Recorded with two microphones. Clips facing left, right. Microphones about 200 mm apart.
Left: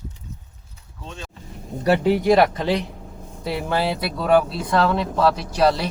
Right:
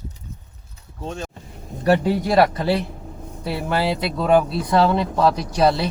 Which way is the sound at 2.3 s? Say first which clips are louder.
Right 1 dB; 20° left (ahead or behind).